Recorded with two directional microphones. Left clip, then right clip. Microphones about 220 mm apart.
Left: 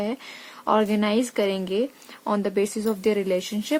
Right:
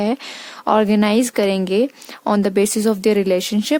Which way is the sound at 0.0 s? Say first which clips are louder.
Right 8 dB; 50° right (ahead or behind).